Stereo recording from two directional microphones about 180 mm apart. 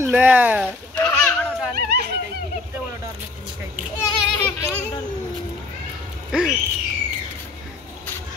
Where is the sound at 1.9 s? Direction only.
65° right (ahead or behind).